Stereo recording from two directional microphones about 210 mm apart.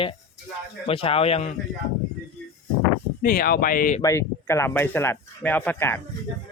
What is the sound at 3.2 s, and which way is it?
Speech, 45° left (ahead or behind).